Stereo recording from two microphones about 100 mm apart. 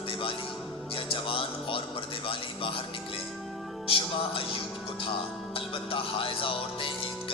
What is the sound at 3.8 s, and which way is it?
Music, 65° left (ahead or behind).